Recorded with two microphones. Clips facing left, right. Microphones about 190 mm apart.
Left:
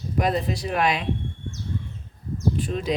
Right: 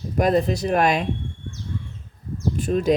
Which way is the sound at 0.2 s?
45° right (ahead or behind).